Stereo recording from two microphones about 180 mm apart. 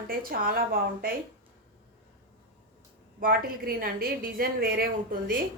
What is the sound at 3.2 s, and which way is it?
A woman's voice, 55° right (ahead or behind).